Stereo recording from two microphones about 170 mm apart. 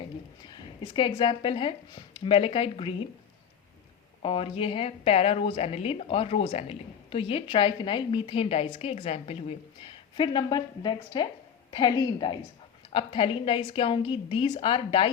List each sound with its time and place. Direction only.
0.4 s a woman's voice: 25° left (ahead or behind)
4.2 s a woman's voice: 30° left (ahead or behind)